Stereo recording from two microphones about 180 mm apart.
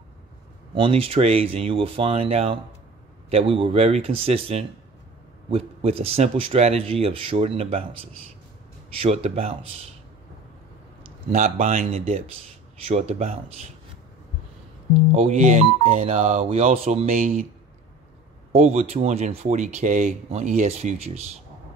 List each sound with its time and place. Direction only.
0.7 s speech: 30° right (ahead or behind)
8.9 s speech: 35° right (ahead or behind)
11.2 s speech: 35° right (ahead or behind)
15.1 s speech: 40° right (ahead or behind)
18.5 s speech: 35° right (ahead or behind)